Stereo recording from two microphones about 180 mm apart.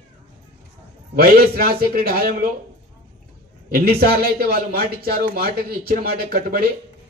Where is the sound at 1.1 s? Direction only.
55° right (ahead or behind).